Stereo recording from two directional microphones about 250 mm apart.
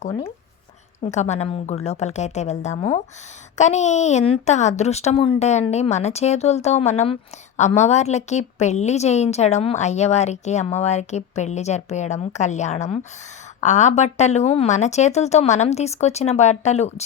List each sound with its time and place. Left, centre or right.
1.0 s a woman's voice: left